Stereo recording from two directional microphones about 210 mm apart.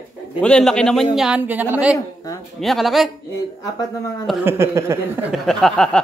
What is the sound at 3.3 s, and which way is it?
Speech, 15° left (ahead or behind).